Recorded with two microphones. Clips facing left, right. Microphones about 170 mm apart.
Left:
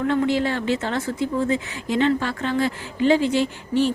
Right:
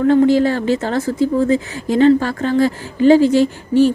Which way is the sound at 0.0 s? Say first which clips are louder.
Right 9 dB; 40° right (ahead or behind).